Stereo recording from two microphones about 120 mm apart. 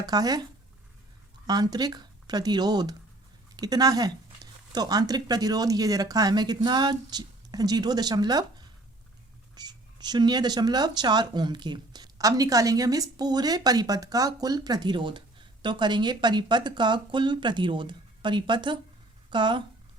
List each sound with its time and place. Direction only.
0.0 s speech: 30° right (ahead or behind)
1.5 s a woman's voice: 35° right (ahead or behind)